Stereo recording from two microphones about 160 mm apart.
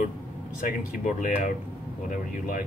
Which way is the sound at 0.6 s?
55° left (ahead or behind).